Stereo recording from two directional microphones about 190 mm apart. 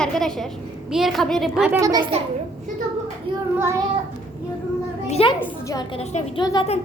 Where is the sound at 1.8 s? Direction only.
20° right (ahead or behind).